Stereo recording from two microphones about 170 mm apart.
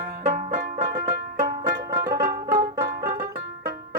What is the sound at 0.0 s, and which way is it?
Banjo, 45° right (ahead or behind).